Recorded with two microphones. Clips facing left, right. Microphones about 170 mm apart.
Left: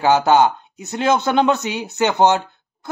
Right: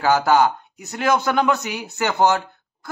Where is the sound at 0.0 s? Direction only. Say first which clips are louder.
Left 2 dB; 20° left (ahead or behind).